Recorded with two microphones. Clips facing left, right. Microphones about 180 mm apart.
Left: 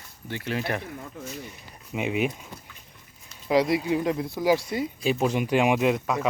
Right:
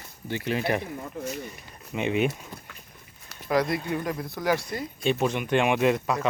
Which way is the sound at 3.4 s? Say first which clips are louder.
Left 3 dB; 15° left (ahead or behind).